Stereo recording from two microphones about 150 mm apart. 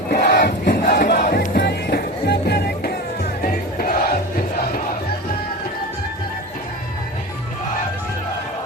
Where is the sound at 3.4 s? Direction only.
75° left (ahead or behind).